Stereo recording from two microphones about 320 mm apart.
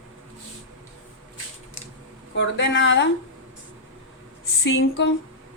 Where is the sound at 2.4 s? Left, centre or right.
Left.